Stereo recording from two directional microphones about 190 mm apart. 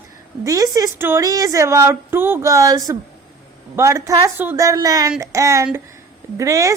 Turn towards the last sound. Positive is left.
turn(degrees=-15)  # may be behind; listen again after turning